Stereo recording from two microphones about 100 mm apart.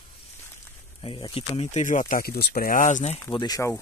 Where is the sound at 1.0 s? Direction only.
60° left (ahead or behind).